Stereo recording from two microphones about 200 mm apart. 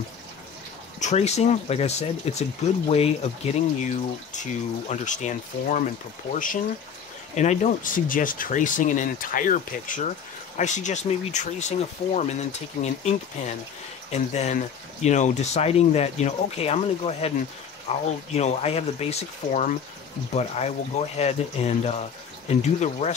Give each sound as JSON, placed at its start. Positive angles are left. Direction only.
{"t": 0.9, "sound": "speech", "side_deg": 35}
{"t": 14.1, "sound": "speech", "side_deg": 35}